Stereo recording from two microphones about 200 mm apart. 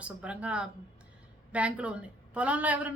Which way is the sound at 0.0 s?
5° right (ahead or behind).